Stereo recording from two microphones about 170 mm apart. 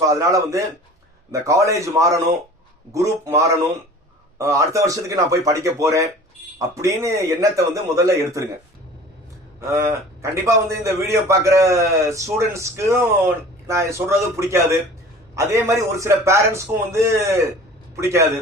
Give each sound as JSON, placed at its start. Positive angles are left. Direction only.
{"t": 0.0, "sound": "a man's voice", "side_deg": -20}
{"t": 9.6, "sound": "a man's voice", "side_deg": -15}